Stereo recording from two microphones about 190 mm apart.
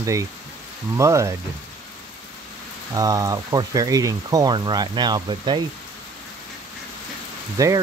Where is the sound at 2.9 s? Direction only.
20° right (ahead or behind).